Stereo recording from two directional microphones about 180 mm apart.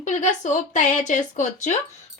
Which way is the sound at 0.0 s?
40° left (ahead or behind).